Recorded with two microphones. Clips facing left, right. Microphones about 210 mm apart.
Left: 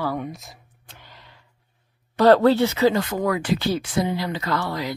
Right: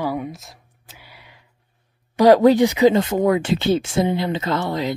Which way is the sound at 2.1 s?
10° right (ahead or behind).